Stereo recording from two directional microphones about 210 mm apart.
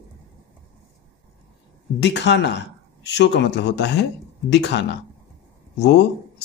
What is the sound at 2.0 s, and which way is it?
Speech, 55° left (ahead or behind).